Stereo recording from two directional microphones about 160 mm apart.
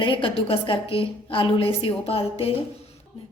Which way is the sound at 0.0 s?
30° left (ahead or behind).